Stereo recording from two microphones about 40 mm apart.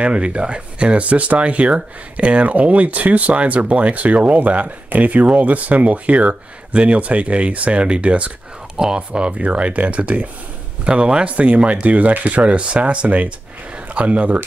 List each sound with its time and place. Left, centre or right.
0.0 s speech: right
8.7 s speech: right
9.4 s speech: right